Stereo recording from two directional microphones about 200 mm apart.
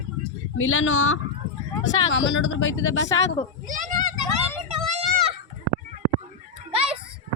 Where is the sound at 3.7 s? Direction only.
40° right (ahead or behind).